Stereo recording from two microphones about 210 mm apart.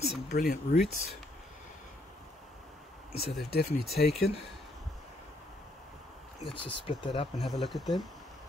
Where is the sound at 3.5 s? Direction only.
50° left (ahead or behind).